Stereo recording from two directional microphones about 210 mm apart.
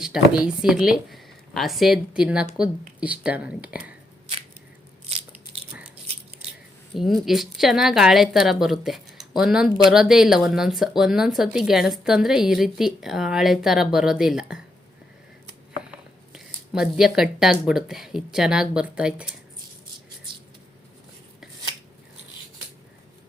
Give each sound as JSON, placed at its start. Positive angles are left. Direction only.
{"t": 0.0, "sound": "a woman's voice", "side_deg": -5}
{"t": 5.0, "sound": "biting", "side_deg": -30}
{"t": 6.9, "sound": "a woman's voice", "side_deg": 0}
{"t": 15.9, "sound": "speech", "side_deg": -5}